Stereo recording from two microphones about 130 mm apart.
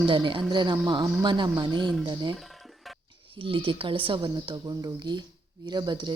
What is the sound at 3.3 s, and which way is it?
Speech, 40° right (ahead or behind).